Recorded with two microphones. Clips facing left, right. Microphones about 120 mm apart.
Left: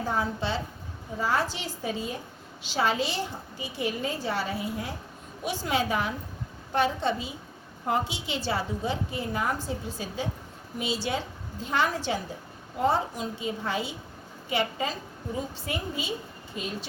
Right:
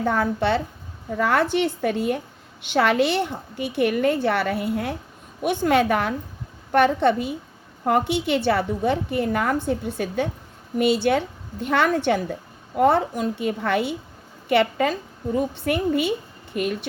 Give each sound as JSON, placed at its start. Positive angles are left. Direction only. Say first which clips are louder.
{"t": 0.0, "sound": "a woman's voice", "louder": "right 7 dB", "side_deg": -60}